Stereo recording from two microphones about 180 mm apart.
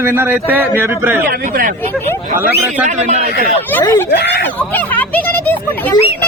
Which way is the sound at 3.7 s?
15° left (ahead or behind).